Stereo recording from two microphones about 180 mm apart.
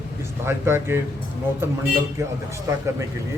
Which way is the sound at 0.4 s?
15° right (ahead or behind).